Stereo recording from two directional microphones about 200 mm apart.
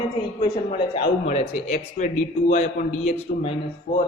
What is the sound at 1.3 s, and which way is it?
A man's voice, 35° left (ahead or behind).